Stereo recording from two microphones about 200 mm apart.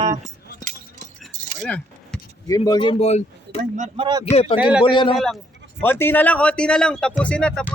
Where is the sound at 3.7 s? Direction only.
30° right (ahead or behind).